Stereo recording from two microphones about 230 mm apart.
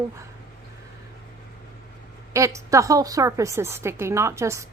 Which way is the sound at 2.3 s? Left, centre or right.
Centre.